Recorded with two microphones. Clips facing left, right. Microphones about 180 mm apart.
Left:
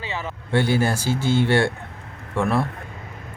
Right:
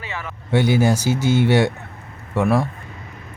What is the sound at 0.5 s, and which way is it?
Speech, 10° right (ahead or behind).